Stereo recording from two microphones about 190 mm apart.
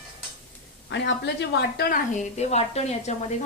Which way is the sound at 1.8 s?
50° left (ahead or behind).